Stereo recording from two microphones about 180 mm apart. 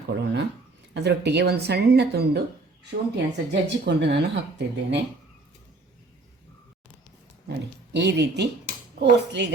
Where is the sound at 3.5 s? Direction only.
70° right (ahead or behind).